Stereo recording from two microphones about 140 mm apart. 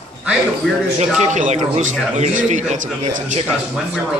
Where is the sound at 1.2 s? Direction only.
55° right (ahead or behind).